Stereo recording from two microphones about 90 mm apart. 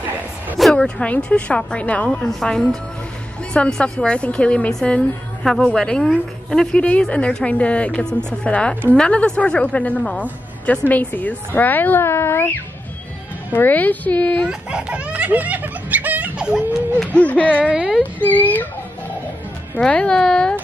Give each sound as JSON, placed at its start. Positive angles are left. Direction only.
{"t": 0.6, "sound": "a woman's voice", "side_deg": 5}
{"t": 13.5, "sound": "a woman's voice", "side_deg": 20}
{"t": 14.5, "sound": "speech", "side_deg": -10}
{"t": 17.0, "sound": "a woman's voice", "side_deg": 15}
{"t": 19.8, "sound": "a woman's voice", "side_deg": 10}